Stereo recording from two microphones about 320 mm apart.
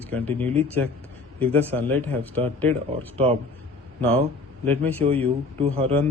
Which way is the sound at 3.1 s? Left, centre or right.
Centre.